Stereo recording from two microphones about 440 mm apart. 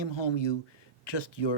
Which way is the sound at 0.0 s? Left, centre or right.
Left.